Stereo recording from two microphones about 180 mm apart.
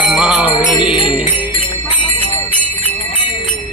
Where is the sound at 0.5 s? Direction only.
25° left (ahead or behind).